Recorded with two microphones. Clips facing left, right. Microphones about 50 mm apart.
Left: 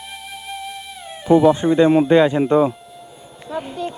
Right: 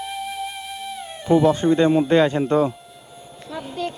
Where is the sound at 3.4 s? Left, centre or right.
Left.